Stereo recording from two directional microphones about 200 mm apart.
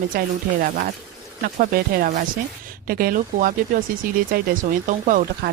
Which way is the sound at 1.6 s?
45° right (ahead or behind).